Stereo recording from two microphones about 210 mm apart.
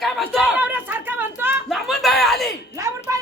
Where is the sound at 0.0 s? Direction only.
Centre (ahead or behind).